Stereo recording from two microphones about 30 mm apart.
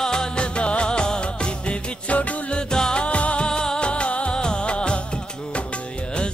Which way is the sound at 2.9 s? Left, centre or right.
Left.